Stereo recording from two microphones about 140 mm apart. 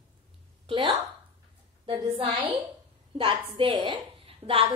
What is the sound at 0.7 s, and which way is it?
Speech, 40° right (ahead or behind).